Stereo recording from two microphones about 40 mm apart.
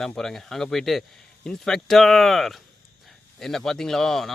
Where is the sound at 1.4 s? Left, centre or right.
Centre.